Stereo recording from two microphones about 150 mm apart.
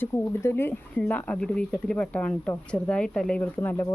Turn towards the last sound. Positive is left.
turn(degrees=15)  # may be behind; listen again after turning